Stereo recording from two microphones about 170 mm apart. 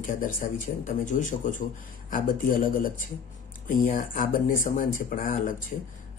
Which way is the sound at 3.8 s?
50° left (ahead or behind).